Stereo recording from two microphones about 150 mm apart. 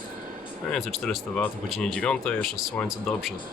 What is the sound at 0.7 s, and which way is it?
Speech, centre (ahead or behind).